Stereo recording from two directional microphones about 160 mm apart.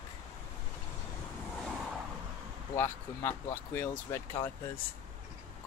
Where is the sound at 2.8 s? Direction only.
15° left (ahead or behind).